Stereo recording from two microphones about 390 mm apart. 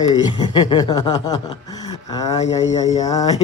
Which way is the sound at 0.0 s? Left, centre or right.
Centre.